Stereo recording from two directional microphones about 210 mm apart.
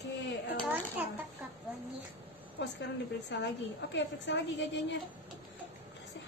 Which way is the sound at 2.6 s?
55° left (ahead or behind).